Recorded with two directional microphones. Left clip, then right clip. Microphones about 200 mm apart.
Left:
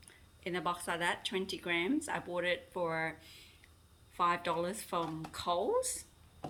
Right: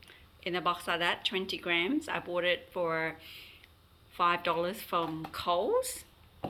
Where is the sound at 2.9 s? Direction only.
5° right (ahead or behind).